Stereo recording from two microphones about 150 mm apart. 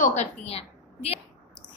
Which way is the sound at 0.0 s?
50° left (ahead or behind).